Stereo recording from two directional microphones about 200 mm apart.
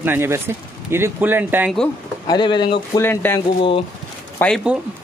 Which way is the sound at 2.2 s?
20° left (ahead or behind).